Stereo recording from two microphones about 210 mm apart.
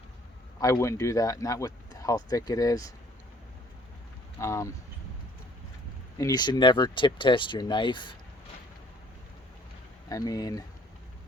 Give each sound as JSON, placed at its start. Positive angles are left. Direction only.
{"t": 0.6, "sound": "speech", "side_deg": 15}
{"t": 4.4, "sound": "speech", "side_deg": 15}
{"t": 6.1, "sound": "speech", "side_deg": 15}
{"t": 10.1, "sound": "speech", "side_deg": 15}